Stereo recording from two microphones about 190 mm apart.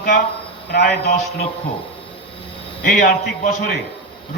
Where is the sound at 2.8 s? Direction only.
40° left (ahead or behind).